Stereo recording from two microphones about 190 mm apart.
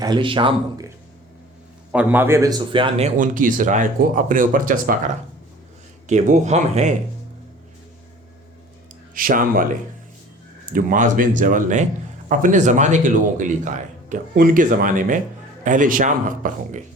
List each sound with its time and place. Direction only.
0.0 s speech: 25° right (ahead or behind)
1.9 s a man's voice: 10° right (ahead or behind); by 3.1 s 25° right (ahead or behind)
3.2 s speech: 45° right (ahead or behind)
9.1 s speech: 45° right (ahead or behind)
10.7 s speech: 45° right (ahead or behind)